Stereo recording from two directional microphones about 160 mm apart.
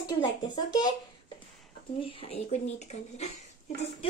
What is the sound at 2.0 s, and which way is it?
Speech, 35° left (ahead or behind).